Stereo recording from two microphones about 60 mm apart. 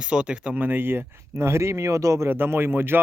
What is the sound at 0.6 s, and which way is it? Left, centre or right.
Speech, right.